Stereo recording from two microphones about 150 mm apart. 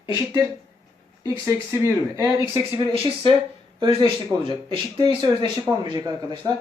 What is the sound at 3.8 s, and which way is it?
Speech, 30° right (ahead or behind).